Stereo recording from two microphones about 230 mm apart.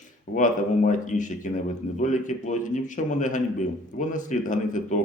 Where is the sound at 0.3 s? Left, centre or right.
Left.